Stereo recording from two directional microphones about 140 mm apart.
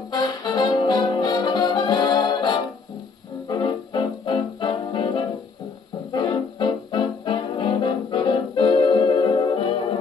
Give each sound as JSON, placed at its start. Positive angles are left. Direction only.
{"t": 0.1, "sound": "brass instrument", "side_deg": 30}
{"t": 3.4, "sound": "music", "side_deg": 30}
{"t": 6.1, "sound": "brass instrument", "side_deg": 35}